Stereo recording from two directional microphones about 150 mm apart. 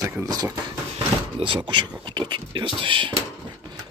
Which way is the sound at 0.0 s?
25° right (ahead or behind).